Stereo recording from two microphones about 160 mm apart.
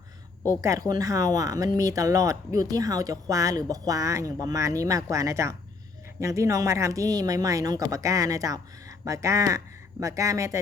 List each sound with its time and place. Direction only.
0.6 s speech: 20° right (ahead or behind)